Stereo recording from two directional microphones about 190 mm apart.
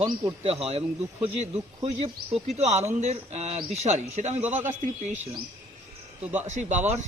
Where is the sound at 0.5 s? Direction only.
35° right (ahead or behind).